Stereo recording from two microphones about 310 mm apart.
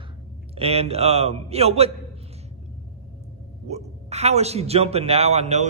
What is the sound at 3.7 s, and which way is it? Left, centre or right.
A man's voice, right.